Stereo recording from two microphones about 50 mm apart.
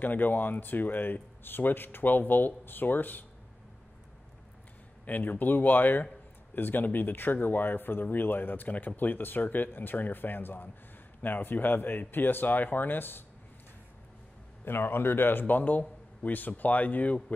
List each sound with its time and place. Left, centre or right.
0.0 s speech: left
5.0 s speech: left
14.6 s speech: left